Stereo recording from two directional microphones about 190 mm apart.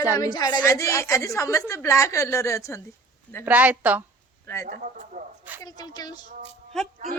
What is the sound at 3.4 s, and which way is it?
Speech, 10° right (ahead or behind).